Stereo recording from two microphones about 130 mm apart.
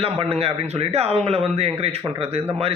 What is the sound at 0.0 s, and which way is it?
Speech, 45° right (ahead or behind).